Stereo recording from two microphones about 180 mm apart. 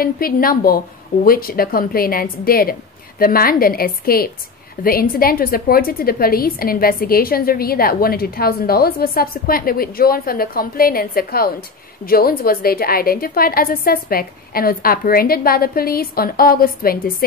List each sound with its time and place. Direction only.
0.0 s a woman's voice: 55° left (ahead or behind)